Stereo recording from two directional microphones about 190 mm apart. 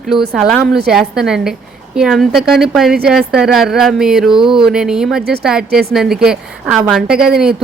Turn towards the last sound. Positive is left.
turn(degrees=-5)  # may be behind; listen again after turning